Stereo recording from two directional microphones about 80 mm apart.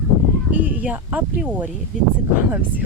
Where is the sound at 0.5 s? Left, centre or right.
Centre.